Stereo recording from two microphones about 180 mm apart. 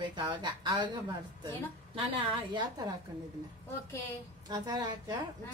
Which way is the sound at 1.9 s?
25° right (ahead or behind).